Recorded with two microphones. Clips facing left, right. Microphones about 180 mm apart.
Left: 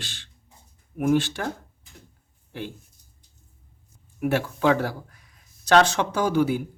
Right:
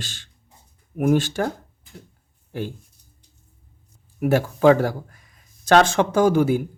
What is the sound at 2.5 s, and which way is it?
Speech, 45° right (ahead or behind).